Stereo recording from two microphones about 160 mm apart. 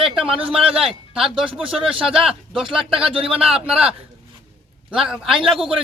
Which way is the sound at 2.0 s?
5° right (ahead or behind).